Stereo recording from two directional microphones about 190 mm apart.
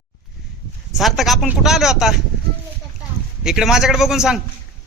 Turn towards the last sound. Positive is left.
turn(degrees=-5)  # may be behind; listen again after turning